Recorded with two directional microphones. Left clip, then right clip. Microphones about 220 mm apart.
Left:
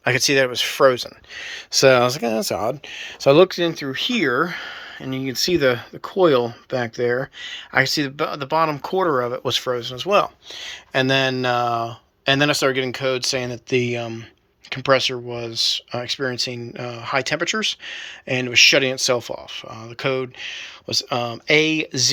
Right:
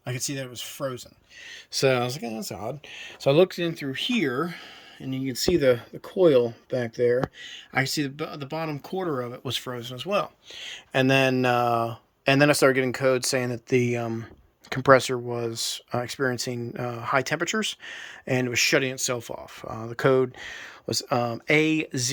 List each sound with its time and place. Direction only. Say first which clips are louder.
0.0 s speech: left 16 dB; centre (ahead or behind)
19.5 s speech: left 1 dB; 25° right (ahead or behind)